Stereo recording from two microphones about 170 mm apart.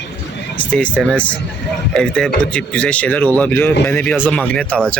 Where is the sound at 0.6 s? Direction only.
10° left (ahead or behind).